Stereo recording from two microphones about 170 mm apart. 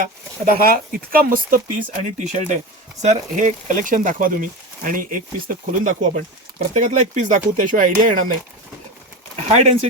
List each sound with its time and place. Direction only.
0.6 s speech: 60° right (ahead or behind)
9.3 s speech: 35° right (ahead or behind)